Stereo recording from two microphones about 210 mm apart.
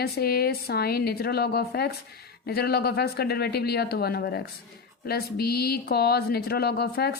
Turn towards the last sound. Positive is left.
turn(degrees=50)  # may be behind; listen again after turning